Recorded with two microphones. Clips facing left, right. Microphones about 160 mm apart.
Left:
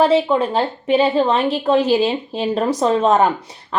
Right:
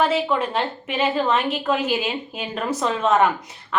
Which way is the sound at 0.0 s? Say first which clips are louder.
Left 6 dB; 30° left (ahead or behind).